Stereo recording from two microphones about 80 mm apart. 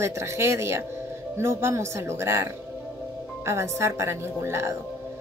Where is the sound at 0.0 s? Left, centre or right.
Right.